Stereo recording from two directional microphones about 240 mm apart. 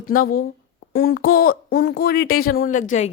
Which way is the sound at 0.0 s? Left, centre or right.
Left.